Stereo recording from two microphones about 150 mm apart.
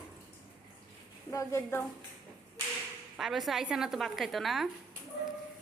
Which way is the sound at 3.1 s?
Centre (ahead or behind).